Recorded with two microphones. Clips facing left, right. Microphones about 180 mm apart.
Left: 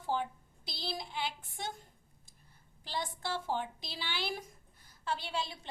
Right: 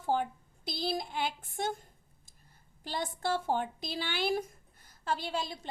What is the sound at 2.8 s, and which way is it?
A woman's voice, 50° right (ahead or behind).